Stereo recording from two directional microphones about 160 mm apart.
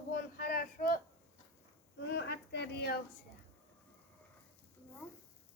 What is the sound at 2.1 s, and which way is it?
Speech, 90° left.